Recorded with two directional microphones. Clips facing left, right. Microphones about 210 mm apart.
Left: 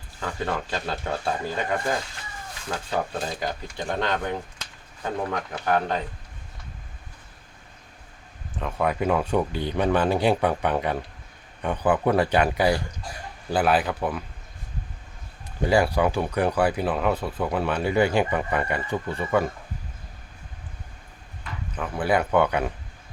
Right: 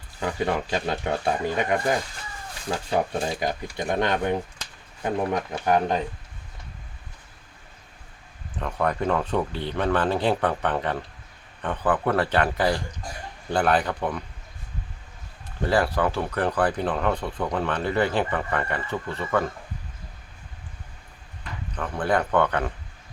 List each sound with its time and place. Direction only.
0.2 s speech: 15° right (ahead or behind)
8.5 s speech: 5° left (ahead or behind)
15.6 s speech: 15° left (ahead or behind)
21.8 s speech: 5° left (ahead or behind)